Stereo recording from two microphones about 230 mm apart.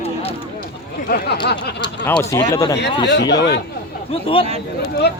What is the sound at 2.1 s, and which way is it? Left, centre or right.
Speech, centre.